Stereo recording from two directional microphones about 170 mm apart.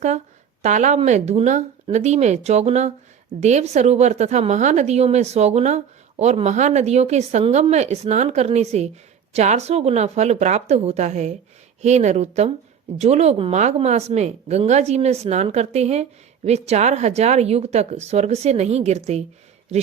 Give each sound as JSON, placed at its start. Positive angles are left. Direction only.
{"t": 0.6, "sound": "a woman's voice", "side_deg": -45}